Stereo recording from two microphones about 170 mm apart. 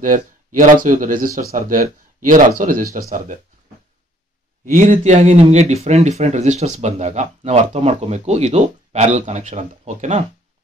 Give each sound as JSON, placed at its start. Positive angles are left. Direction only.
{"t": 0.0, "sound": "speech", "side_deg": -50}
{"t": 4.6, "sound": "speech", "side_deg": -50}